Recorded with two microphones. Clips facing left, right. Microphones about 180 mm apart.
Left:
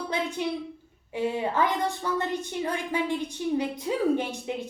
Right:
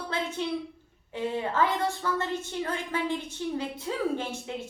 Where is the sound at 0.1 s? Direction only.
15° left (ahead or behind).